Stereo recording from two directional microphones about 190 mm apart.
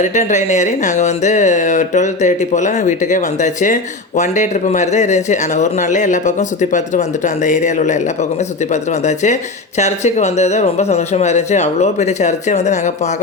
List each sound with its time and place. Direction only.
0.0 s speech: 40° left (ahead or behind)